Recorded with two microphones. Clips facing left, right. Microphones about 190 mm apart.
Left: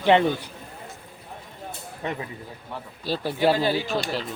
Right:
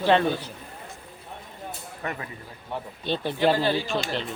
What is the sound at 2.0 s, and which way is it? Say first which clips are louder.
Speech: left 3 dB; 20° left (ahead or behind).